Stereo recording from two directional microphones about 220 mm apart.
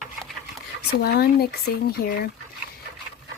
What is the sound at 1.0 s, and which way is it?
Speech, 45° left (ahead or behind).